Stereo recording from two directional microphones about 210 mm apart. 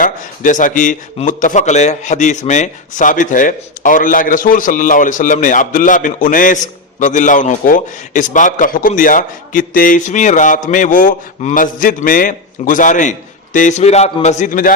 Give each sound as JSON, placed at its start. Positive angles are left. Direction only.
{"t": 0.0, "sound": "a man's voice", "side_deg": 40}